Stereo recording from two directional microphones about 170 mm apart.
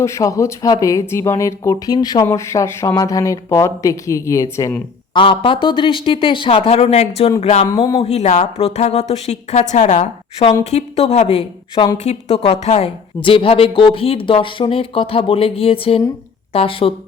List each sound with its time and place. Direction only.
0.0 s speech: 20° left (ahead or behind)
5.1 s speech: 30° left (ahead or behind)